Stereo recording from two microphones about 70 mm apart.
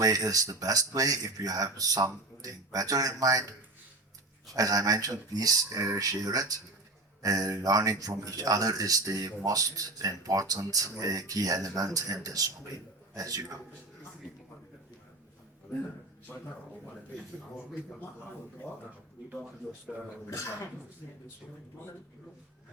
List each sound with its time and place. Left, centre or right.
0.0 s speech: right
4.5 s speech: right
19.9 s speech: centre
20.3 s speech: left